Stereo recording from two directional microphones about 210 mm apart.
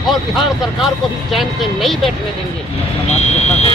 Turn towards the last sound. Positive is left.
turn(degrees=30)  # may be behind; listen again after turning